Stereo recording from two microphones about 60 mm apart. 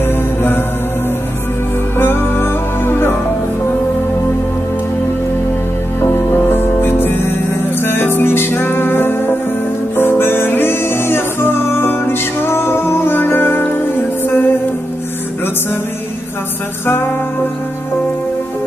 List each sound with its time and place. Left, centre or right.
0.0 s music: left
2.0 s music: left
5.9 s music: left